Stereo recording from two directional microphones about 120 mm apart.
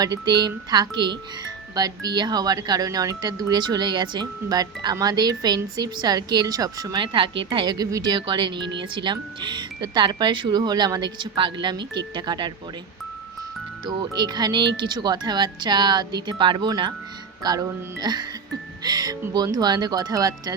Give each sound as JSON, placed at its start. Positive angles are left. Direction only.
{"t": 0.0, "sound": "speech", "side_deg": -35}
{"t": 7.0, "sound": "speech", "side_deg": -45}
{"t": 13.8, "sound": "speech", "side_deg": -40}